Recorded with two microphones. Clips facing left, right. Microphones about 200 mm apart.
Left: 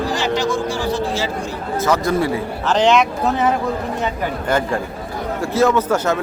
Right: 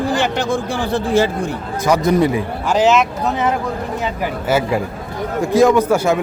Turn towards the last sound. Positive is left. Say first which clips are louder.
# right 3 dB
turn(degrees=-10)  # may be behind; listen again after turning